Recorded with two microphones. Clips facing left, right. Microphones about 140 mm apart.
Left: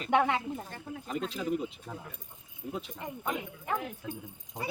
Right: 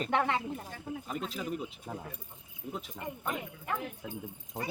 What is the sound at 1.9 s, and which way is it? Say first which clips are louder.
Speech: right 2 dB; 15° right (ahead or behind).